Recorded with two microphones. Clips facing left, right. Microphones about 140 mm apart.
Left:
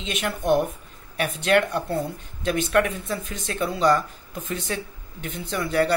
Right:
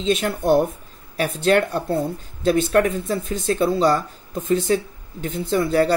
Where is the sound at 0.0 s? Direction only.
35° right (ahead or behind).